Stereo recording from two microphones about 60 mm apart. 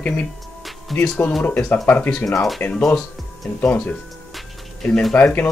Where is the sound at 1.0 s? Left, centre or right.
Centre.